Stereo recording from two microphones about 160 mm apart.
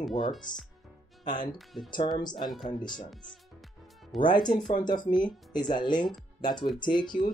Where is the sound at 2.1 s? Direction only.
25° left (ahead or behind).